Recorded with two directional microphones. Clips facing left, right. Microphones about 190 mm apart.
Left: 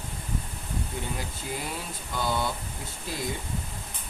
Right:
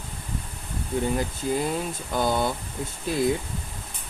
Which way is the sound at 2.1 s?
50° right (ahead or behind).